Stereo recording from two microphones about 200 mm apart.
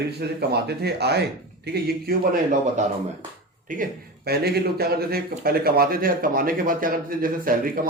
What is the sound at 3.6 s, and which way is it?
Speech, 40° right (ahead or behind).